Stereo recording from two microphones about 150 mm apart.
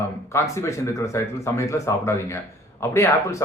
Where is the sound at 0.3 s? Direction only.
20° left (ahead or behind).